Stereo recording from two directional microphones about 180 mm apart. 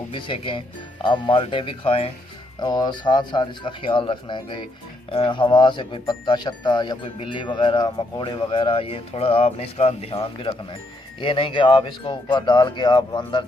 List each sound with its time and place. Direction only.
0.1 s speech: 30° left (ahead or behind)